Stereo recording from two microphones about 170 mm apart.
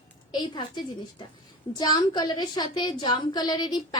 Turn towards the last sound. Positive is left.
turn(degrees=25)  # may be behind; listen again after turning